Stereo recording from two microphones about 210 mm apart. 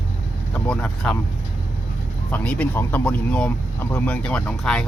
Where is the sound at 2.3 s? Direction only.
5° left (ahead or behind).